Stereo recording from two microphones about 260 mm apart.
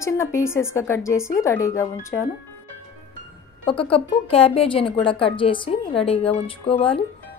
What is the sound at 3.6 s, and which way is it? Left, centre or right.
A woman's voice, left.